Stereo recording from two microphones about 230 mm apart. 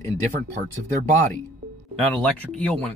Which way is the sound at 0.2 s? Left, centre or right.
Right.